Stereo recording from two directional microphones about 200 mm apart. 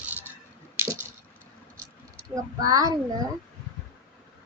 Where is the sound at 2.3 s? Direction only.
15° right (ahead or behind).